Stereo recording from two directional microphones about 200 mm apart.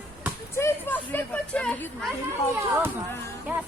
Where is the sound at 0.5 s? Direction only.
10° left (ahead or behind).